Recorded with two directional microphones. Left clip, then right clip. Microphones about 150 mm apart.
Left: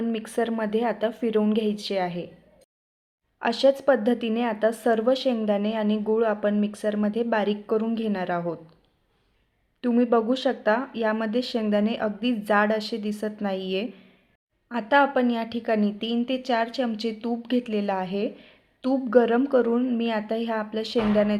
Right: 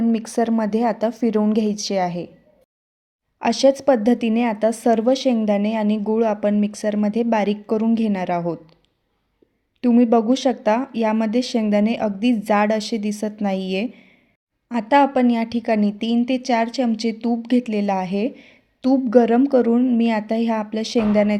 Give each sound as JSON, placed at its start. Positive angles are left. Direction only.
{"t": 0.1, "sound": "speech", "side_deg": -40}
{"t": 3.3, "sound": "speech", "side_deg": -40}
{"t": 9.8, "sound": "speech", "side_deg": -40}